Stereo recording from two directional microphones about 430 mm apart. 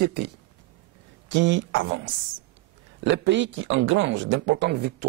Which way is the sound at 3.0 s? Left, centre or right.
Right.